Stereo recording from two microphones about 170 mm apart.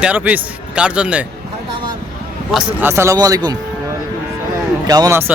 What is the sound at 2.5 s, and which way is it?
Speech, centre (ahead or behind).